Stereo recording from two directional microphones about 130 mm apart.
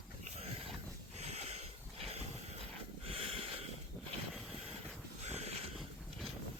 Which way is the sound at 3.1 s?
45° right (ahead or behind).